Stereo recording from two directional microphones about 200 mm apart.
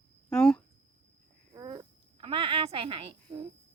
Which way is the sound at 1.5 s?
20° right (ahead or behind).